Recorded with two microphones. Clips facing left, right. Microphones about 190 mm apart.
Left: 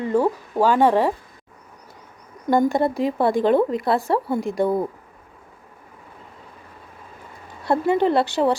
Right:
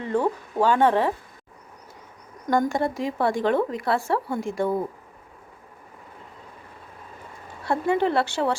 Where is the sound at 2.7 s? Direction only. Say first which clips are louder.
Left 4 dB; 35° left (ahead or behind).